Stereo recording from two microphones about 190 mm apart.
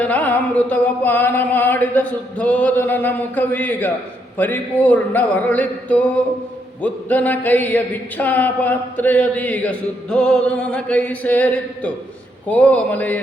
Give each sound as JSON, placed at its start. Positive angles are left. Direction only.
{"t": 0.0, "sound": "music", "side_deg": 10}